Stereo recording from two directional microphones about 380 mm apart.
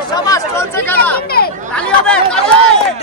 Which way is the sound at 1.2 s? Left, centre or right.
Left.